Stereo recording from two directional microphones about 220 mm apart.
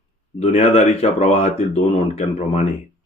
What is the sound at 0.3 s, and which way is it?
Speech, 30° left (ahead or behind).